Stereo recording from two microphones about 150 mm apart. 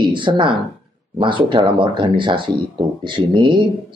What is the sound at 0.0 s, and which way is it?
Speech, 35° right (ahead or behind).